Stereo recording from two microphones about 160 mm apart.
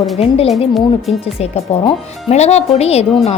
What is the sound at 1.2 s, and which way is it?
A woman's voice, 40° left (ahead or behind).